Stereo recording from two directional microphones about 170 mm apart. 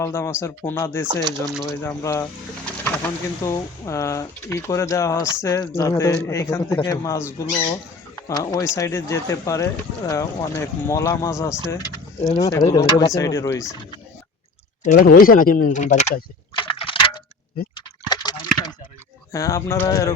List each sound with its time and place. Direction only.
0.0 s speech: 15° left (ahead or behind)
1.0 s speech: 25° right (ahead or behind)
1.7 s speech: 15° left (ahead or behind)
3.4 s speech: 15° left (ahead or behind)
14.8 s speech: 55° left (ahead or behind)
16.6 s a sound: 30° left (ahead or behind)
19.3 s speech: 20° left (ahead or behind)